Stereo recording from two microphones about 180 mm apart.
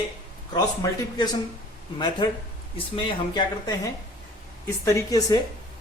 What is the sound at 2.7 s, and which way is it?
A woman's voice, 30° left (ahead or behind).